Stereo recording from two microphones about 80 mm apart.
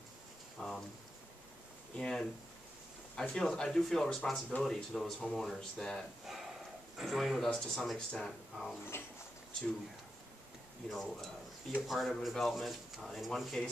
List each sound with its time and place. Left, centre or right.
0.6 s a sound: centre
2.0 s speech: centre
8.9 s speech: left
10.9 s speech: centre